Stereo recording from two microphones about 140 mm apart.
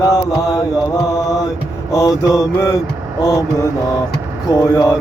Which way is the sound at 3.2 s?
25° left (ahead or behind).